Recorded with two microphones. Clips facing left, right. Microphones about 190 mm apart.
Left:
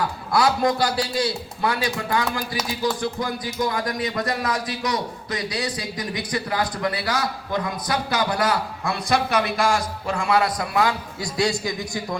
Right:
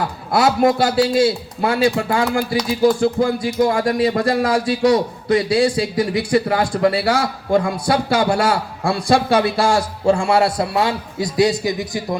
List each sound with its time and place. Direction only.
0.3 s speech: 25° right (ahead or behind)